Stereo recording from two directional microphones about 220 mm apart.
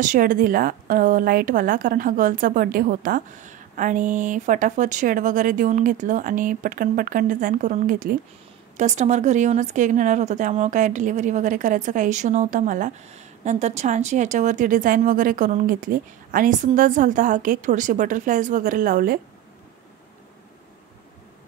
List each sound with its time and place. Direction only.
0.0 s speech: 35° right (ahead or behind)